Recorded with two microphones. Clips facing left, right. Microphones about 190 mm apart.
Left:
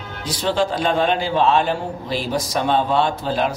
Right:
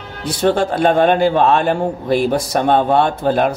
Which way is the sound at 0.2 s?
60° right (ahead or behind).